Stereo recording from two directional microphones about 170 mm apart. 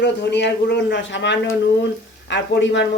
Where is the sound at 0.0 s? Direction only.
90° left.